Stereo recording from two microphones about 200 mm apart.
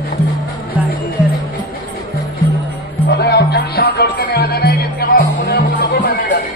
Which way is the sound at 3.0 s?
55° left (ahead or behind).